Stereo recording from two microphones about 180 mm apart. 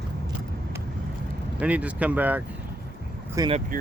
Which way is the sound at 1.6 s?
5° right (ahead or behind).